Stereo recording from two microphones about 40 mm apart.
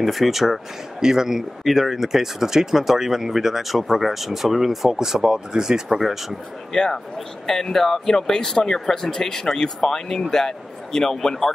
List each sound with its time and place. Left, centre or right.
0.0 s speech: centre
6.7 s speech: centre